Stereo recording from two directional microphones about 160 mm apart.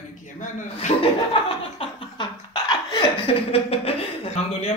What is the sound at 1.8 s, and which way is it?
Laughter, 30° left (ahead or behind).